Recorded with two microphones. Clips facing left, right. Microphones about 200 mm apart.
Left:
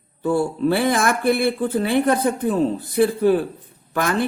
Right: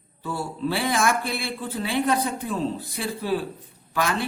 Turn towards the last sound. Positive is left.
turn(degrees=50)  # may be behind; listen again after turning